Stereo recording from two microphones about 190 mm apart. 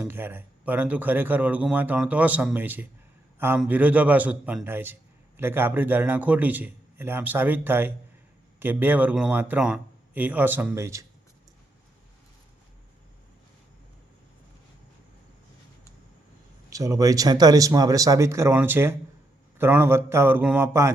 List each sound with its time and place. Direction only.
0.0 s a man's voice: 10° right (ahead or behind)
16.6 s speech: 15° right (ahead or behind)